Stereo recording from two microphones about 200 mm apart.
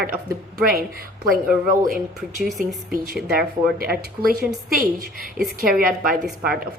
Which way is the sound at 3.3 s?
50° right (ahead or behind).